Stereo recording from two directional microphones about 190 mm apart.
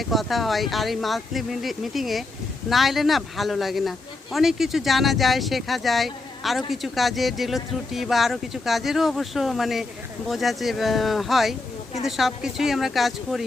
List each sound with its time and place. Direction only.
0.0 s speech: centre (ahead or behind)